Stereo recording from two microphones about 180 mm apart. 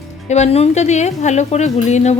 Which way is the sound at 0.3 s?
40° left (ahead or behind).